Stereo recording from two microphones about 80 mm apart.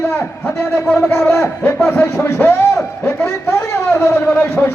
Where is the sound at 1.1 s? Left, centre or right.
Left.